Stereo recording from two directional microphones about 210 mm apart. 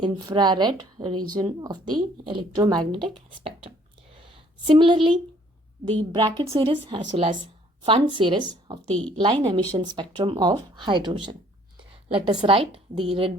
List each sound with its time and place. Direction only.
0.0 s a woman's voice: 20° right (ahead or behind)
3.2 s a sound: 25° right (ahead or behind)
5.8 s a woman's voice: 20° right (ahead or behind)
8.9 s a woman's voice: 5° left (ahead or behind)
9.1 s a woman's voice: 20° right (ahead or behind)